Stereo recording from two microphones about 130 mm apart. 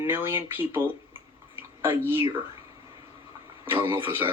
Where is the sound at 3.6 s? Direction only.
20° right (ahead or behind).